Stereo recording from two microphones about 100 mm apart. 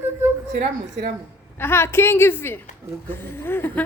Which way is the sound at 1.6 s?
25° left (ahead or behind).